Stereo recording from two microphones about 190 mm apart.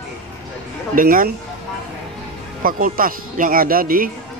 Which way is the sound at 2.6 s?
50° right (ahead or behind).